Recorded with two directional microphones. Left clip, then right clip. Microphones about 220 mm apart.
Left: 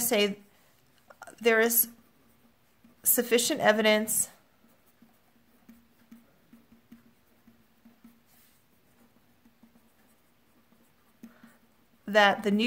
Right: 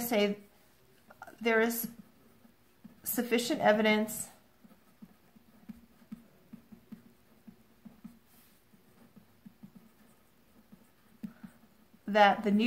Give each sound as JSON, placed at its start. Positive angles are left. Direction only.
{"t": 0.0, "sound": "a woman's voice", "side_deg": 45}
{"t": 1.0, "sound": "a sound", "side_deg": 40}
{"t": 3.0, "sound": "a woman's voice", "side_deg": 40}
{"t": 12.1, "sound": "a woman's voice", "side_deg": 40}